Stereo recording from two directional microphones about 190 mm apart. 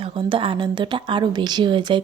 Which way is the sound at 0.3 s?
25° right (ahead or behind).